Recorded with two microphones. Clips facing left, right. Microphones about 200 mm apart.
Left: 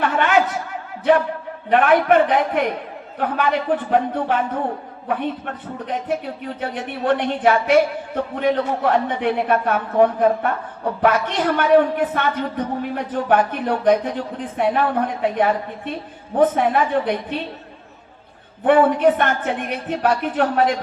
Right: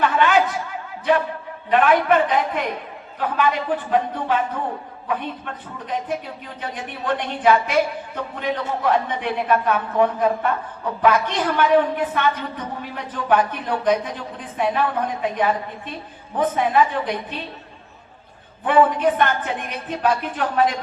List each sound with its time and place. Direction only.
0.0 s speech: 55° left (ahead or behind)
1.7 s a man's voice: 50° left (ahead or behind)
5.9 s speech: 45° left (ahead or behind)
18.6 s speech: 50° left (ahead or behind)